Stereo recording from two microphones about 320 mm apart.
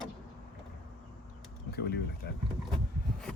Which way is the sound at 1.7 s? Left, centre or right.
Left.